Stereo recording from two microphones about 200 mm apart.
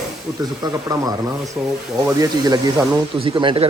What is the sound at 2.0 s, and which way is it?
Speech, 20° right (ahead or behind).